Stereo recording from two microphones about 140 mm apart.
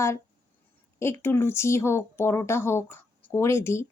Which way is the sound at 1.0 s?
15° left (ahead or behind).